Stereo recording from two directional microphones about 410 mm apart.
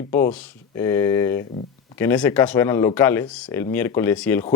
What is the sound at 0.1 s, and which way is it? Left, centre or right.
A man's voice, centre.